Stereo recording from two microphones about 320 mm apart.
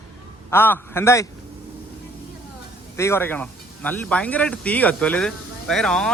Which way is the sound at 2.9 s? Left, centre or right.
Centre.